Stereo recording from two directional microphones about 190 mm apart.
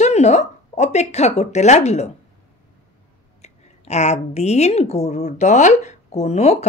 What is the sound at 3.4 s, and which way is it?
A woman's voice, 35° left (ahead or behind).